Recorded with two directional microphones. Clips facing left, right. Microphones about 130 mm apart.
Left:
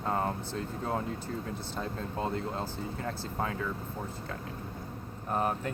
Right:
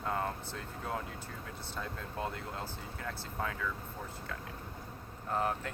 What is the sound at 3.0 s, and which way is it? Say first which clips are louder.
Speech: left 3 dB; 45° left (ahead or behind).